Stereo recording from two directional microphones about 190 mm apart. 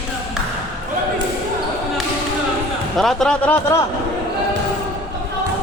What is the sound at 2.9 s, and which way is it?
Speech, centre (ahead or behind).